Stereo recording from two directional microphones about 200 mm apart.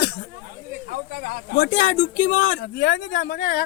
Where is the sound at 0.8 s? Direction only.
45° right (ahead or behind).